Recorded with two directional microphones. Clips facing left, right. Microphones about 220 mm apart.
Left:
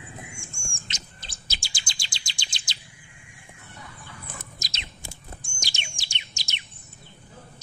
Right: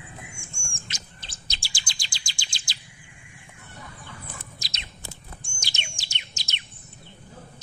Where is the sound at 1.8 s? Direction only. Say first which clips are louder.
Even; 20° left (ahead or behind).